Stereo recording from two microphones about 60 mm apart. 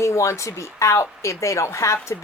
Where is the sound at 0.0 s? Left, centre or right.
Left.